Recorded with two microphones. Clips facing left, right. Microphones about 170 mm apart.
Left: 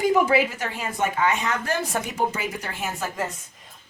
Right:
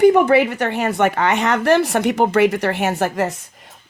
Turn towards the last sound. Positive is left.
turn(degrees=-75)  # may be behind; listen again after turning